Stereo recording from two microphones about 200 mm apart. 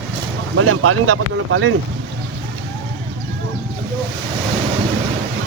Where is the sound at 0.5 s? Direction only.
90° right.